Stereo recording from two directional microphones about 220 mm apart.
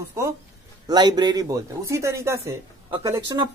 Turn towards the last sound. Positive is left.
turn(degrees=-15)  # may be behind; listen again after turning